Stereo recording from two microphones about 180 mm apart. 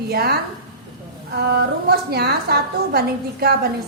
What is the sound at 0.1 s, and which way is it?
A woman's voice, 60° right (ahead or behind).